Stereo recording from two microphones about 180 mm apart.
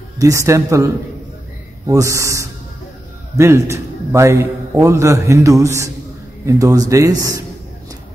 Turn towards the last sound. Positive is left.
turn(degrees=-20)  # may be behind; listen again after turning